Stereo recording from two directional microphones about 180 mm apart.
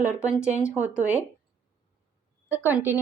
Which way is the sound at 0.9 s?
5° right (ahead or behind).